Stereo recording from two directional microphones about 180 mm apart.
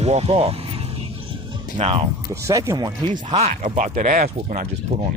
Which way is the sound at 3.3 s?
35° right (ahead or behind).